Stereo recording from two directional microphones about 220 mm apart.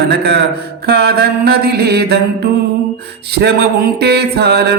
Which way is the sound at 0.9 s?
45° right (ahead or behind).